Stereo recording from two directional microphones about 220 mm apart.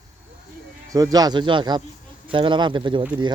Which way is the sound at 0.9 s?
15° right (ahead or behind).